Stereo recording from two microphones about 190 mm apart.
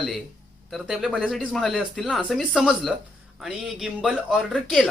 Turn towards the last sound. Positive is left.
turn(degrees=0)  # may be behind; listen again after turning